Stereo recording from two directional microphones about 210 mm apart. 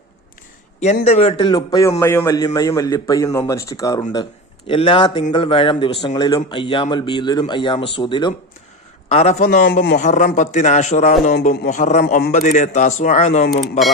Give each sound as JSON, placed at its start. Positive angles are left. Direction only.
{"t": 1.0, "sound": "a man's voice", "side_deg": 30}
{"t": 13.5, "sound": "speech", "side_deg": 0}